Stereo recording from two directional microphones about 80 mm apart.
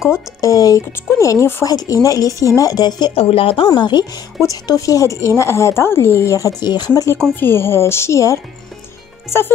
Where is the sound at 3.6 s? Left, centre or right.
Left.